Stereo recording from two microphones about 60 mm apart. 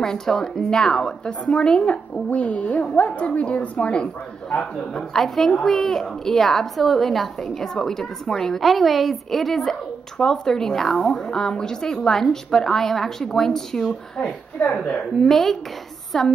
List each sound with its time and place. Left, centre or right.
0.0 s a woman's voice: centre
4.6 s speech: centre
14.6 s speech: left
15.1 s speech: centre